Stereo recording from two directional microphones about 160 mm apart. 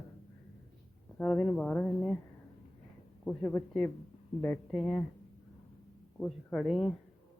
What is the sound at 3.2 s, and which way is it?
A woman's voice, 15° left (ahead or behind).